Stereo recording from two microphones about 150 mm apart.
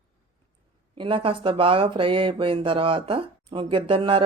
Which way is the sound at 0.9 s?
35° right (ahead or behind).